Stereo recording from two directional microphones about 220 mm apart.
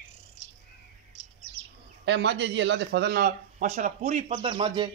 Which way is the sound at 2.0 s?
55° right (ahead or behind).